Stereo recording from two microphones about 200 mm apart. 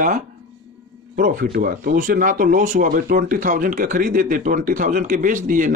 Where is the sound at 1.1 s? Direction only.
45° right (ahead or behind).